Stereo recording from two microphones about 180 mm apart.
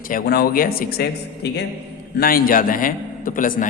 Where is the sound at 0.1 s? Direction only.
55° left (ahead or behind).